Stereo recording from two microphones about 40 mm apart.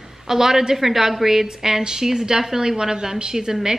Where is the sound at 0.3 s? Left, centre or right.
Centre.